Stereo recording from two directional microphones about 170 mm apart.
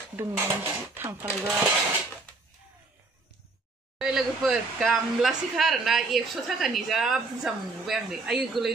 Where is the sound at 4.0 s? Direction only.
Centre (ahead or behind).